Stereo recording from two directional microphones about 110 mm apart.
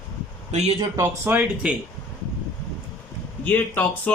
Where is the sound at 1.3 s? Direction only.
15° right (ahead or behind).